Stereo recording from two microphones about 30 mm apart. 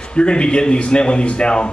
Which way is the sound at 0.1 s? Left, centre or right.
Left.